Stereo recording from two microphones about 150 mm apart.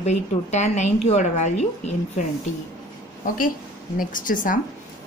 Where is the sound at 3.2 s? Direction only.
65° left (ahead or behind).